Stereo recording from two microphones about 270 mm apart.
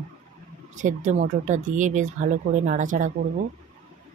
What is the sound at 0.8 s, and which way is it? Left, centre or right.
Speech, right.